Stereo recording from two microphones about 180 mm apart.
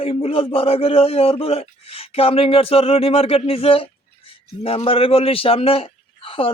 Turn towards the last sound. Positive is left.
turn(degrees=30)  # may be behind; listen again after turning